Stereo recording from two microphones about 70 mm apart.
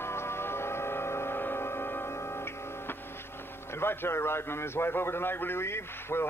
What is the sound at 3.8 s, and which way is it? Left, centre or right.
A man's voice, left.